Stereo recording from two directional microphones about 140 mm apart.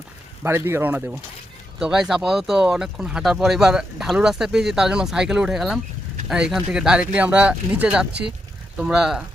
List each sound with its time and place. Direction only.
0.4 s speech: 15° right (ahead or behind)
1.8 s speech: 5° right (ahead or behind)